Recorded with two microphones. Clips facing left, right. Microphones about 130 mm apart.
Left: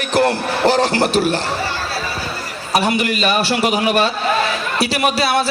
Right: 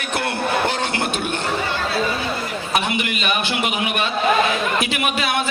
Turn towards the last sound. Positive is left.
turn(degrees=35)  # may be behind; listen again after turning